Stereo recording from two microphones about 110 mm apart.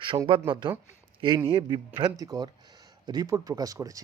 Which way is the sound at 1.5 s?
40° right (ahead or behind).